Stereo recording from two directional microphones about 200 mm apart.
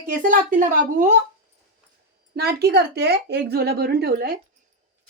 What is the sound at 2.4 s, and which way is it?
Speech, 55° right (ahead or behind).